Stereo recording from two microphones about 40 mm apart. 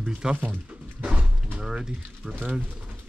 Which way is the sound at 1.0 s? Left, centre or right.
Right.